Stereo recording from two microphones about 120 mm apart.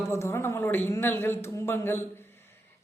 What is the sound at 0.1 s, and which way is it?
Speech, 20° left (ahead or behind).